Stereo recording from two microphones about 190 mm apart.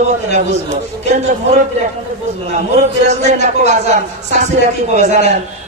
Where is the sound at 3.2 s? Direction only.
40° right (ahead or behind).